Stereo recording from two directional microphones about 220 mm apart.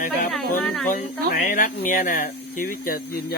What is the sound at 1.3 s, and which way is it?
Speech, 40° left (ahead or behind).